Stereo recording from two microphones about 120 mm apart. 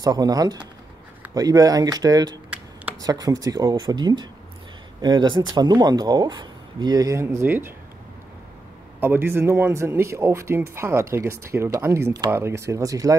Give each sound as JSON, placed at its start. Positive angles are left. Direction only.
{"t": 0.0, "sound": "speech", "side_deg": -30}
{"t": 9.0, "sound": "speech", "side_deg": -20}